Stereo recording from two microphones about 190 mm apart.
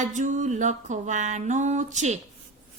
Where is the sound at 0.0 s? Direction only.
40° right (ahead or behind).